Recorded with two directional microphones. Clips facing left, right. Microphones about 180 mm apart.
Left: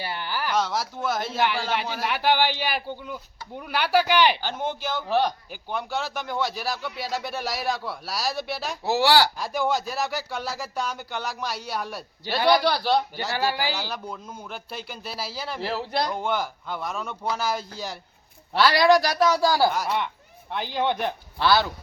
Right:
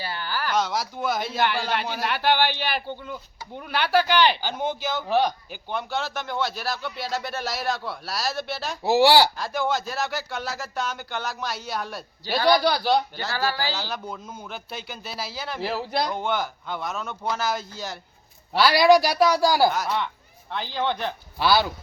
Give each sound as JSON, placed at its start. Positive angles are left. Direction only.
{"t": 0.0, "sound": "a sound", "side_deg": 20}
{"t": 0.5, "sound": "a man's voice", "side_deg": 5}
{"t": 4.4, "sound": "a man's voice", "side_deg": -5}
{"t": 8.8, "sound": "speech", "side_deg": -15}
{"t": 9.4, "sound": "a man's voice", "side_deg": 10}
{"t": 13.1, "sound": "a man's voice", "side_deg": 15}
{"t": 14.1, "sound": "a man's voice", "side_deg": -5}
{"t": 18.5, "sound": "a man's voice", "side_deg": -5}
{"t": 19.7, "sound": "a man's voice", "side_deg": 10}
{"t": 21.3, "sound": "speech", "side_deg": -5}